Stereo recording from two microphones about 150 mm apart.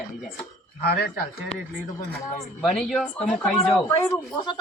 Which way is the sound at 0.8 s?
90° left.